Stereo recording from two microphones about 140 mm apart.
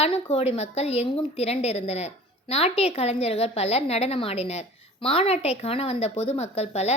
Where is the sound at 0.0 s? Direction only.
50° left (ahead or behind).